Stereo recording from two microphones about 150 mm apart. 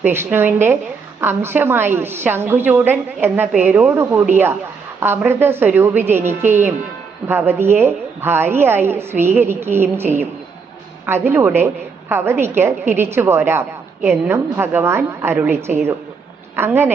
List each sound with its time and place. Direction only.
0.0 s a woman's voice: 15° right (ahead or behind)